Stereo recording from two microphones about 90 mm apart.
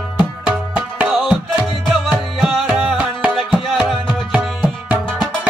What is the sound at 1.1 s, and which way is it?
Music, 5° left (ahead or behind).